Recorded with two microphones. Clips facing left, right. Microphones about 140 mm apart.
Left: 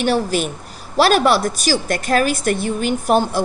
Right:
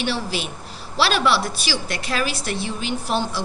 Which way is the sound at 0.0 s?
45° left (ahead or behind).